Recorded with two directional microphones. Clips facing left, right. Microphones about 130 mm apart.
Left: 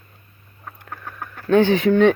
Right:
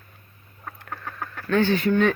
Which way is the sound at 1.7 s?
90° left.